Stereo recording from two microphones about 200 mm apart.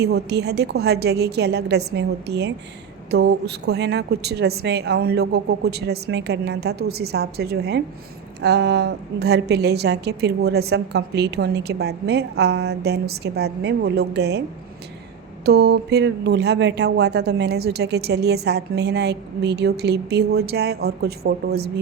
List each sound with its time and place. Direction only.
0.0 s speech: 55° right (ahead or behind)
15.4 s speech: 55° right (ahead or behind)